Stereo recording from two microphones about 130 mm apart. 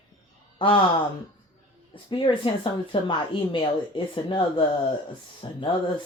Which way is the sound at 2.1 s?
40° left (ahead or behind).